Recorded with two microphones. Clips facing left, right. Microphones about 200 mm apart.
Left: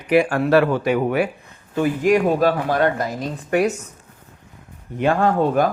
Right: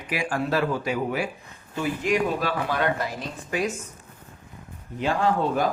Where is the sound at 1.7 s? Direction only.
50° left (ahead or behind).